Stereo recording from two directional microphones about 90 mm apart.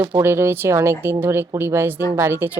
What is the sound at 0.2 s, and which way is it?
Speech, 25° right (ahead or behind).